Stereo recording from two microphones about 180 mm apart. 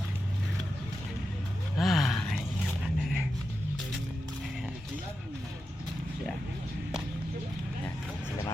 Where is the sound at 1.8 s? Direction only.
Centre (ahead or behind).